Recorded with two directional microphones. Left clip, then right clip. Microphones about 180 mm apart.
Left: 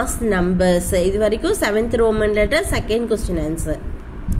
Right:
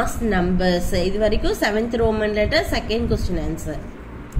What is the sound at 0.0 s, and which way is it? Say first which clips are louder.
A woman's voice: left 2 dB; 45° left (ahead or behind).